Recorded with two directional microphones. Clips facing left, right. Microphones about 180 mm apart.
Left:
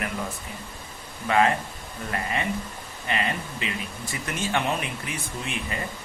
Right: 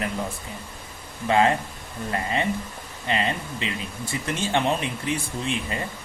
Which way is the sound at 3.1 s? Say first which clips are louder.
Right 2 dB; 30° right (ahead or behind).